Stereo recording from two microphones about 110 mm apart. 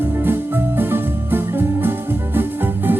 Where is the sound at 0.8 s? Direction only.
20° right (ahead or behind).